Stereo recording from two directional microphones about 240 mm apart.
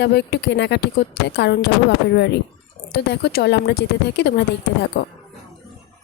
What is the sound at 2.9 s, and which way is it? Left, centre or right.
Speech, left.